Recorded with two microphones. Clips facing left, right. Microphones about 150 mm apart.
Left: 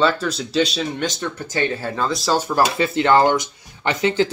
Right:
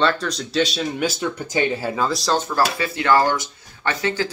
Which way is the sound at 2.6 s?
25° left (ahead or behind).